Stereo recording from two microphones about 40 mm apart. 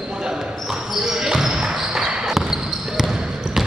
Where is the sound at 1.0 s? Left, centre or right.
Centre.